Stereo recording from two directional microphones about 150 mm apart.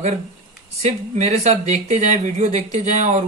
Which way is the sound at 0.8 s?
50° right (ahead or behind).